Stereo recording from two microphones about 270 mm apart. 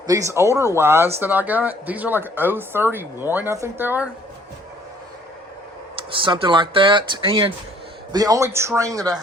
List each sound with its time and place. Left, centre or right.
0.1 s speech: centre
6.1 s speech: centre